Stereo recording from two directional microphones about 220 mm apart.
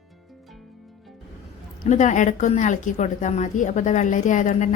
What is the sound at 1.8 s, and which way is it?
A woman's voice, 35° left (ahead or behind).